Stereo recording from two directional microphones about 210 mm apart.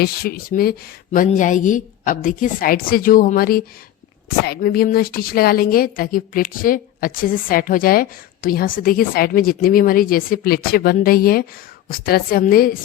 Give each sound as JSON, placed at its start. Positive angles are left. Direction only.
{"t": 0.0, "sound": "a woman's voice", "side_deg": 45}